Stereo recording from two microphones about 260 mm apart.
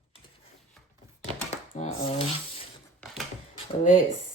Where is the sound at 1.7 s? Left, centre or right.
Left.